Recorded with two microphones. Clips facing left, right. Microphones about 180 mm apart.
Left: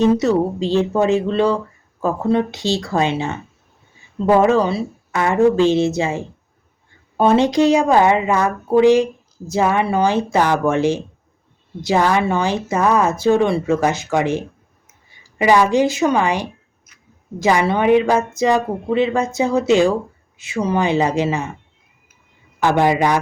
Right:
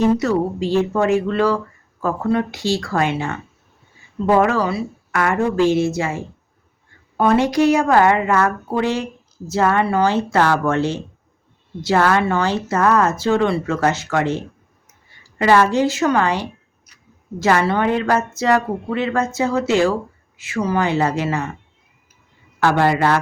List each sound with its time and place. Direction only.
0.2 s a woman's voice: 20° left (ahead or behind)
4.4 s a woman's voice: 20° left (ahead or behind)
22.6 s speech: 15° left (ahead or behind)